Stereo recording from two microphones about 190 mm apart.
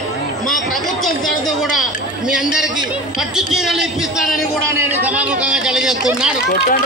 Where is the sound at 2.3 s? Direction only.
5° right (ahead or behind).